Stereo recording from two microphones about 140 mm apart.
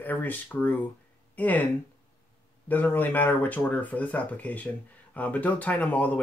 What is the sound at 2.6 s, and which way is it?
Speech, 15° left (ahead or behind).